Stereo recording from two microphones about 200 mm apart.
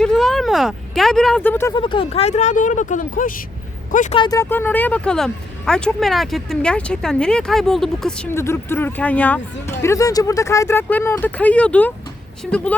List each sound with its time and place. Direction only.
0.0 s speech: centre (ahead or behind)
1.8 s speech: 25° left (ahead or behind)
4.2 s speech: 15° left (ahead or behind)